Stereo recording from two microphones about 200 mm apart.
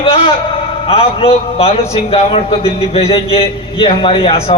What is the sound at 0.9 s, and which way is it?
A man's voice, 30° left (ahead or behind).